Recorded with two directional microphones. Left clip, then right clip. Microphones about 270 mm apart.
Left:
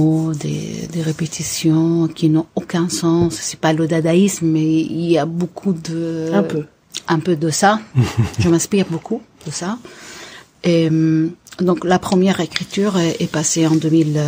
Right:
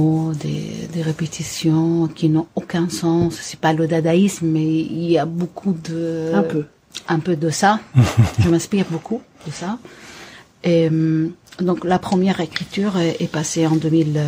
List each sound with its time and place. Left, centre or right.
0.0 s speech: left
7.9 s speech: right
8.4 s speech: left